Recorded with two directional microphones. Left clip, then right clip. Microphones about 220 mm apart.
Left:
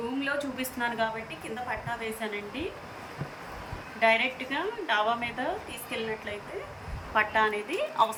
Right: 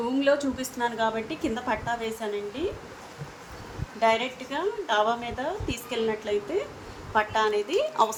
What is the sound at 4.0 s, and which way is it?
A woman's voice, 45° right (ahead or behind).